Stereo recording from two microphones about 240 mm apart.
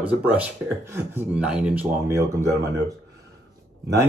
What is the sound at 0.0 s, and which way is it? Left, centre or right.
Speech, centre.